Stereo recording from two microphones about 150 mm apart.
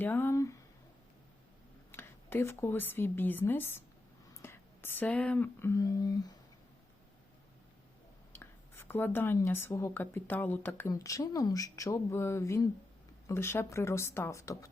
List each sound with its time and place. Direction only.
0.0 s speech: 15° left (ahead or behind)
1.9 s a woman's voice: 15° left (ahead or behind)
8.3 s speech: 15° left (ahead or behind)